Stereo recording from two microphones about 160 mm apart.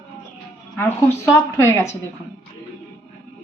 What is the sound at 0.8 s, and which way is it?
A woman's voice, 15° left (ahead or behind).